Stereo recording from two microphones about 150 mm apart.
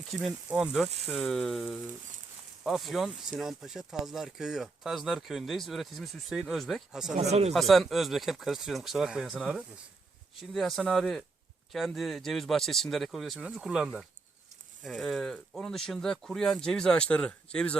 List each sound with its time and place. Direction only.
0.2 s speech: 5° right (ahead or behind)
7.1 s speech: 45° right (ahead or behind)
7.5 s speech: centre (ahead or behind)